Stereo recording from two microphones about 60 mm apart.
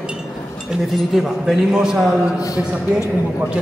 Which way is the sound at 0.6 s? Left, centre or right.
Centre.